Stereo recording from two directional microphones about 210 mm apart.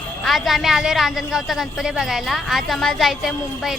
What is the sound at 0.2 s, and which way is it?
A woman's voice, centre (ahead or behind).